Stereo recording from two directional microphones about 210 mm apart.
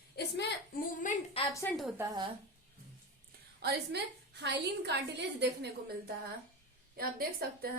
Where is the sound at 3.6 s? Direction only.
50° right (ahead or behind).